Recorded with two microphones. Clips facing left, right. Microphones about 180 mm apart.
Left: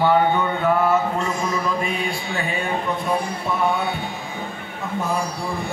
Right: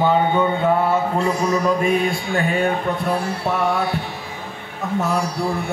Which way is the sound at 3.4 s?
80° right.